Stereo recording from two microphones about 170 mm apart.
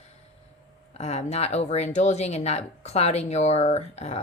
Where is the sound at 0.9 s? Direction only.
40° left (ahead or behind).